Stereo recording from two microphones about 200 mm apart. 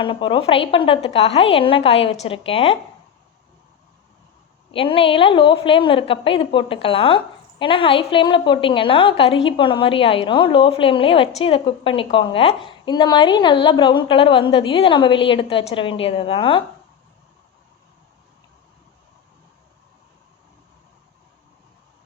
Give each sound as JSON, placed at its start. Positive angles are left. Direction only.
{"t": 0.0, "sound": "a woman's voice", "side_deg": 25}
{"t": 4.7, "sound": "a woman's voice", "side_deg": 25}